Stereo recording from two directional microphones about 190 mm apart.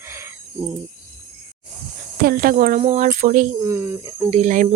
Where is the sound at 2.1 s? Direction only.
55° right (ahead or behind).